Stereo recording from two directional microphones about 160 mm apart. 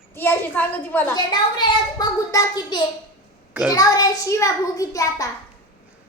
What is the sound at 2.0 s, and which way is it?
A child's voice, 25° left (ahead or behind).